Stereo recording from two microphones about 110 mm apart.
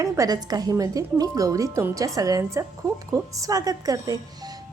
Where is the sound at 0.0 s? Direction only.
35° right (ahead or behind).